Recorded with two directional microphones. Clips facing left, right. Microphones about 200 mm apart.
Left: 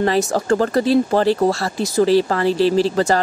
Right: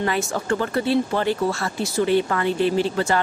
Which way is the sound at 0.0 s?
40° left (ahead or behind).